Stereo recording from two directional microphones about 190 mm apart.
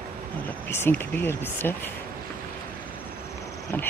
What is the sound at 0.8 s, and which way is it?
Speech, 10° left (ahead or behind).